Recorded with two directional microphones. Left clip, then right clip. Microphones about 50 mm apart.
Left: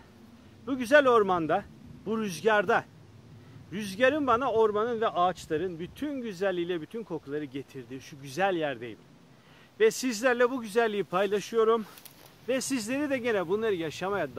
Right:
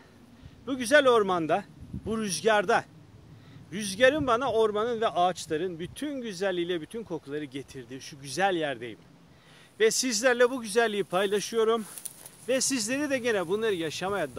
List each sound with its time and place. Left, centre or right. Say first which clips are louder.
0.7 s speech: even; centre
5.9 s speech: left 1 dB; left
6.5 s speech: right 1 dB; centre